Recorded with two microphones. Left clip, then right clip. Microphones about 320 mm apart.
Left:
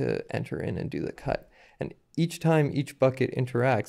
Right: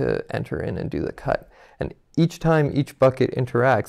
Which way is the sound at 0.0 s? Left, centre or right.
Right.